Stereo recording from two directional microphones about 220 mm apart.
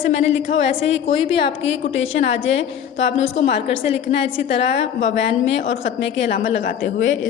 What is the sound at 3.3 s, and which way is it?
Speech, 30° left (ahead or behind).